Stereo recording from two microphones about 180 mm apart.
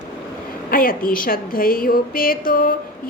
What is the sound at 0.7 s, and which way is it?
A woman's voice, 50° left (ahead or behind).